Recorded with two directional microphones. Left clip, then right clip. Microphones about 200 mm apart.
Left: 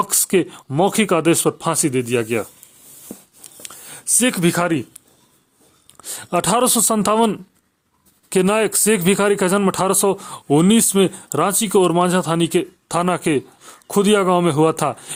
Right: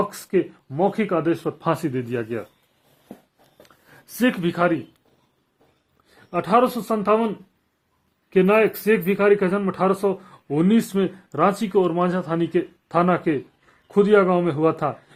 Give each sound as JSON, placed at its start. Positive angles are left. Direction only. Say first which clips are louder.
{"t": 0.3, "sound": "a man's voice", "louder": "left 4 dB", "side_deg": 45}
{"t": 3.6, "sound": "a sound", "louder": "left 12 dB", "side_deg": 25}
{"t": 6.1, "sound": "a man's voice", "louder": "left 3 dB", "side_deg": 40}
{"t": 8.3, "sound": "a man's voice", "louder": "even", "side_deg": 35}